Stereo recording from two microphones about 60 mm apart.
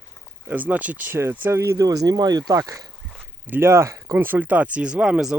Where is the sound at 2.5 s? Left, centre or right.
Right.